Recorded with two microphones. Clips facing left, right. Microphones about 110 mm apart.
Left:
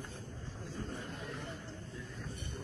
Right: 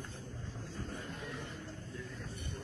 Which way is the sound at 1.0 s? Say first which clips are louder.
Even; centre (ahead or behind).